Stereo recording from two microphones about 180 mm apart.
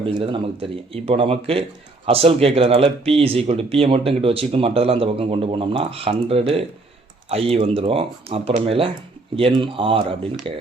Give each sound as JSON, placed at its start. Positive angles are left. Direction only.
{"t": 0.0, "sound": "speech", "side_deg": -30}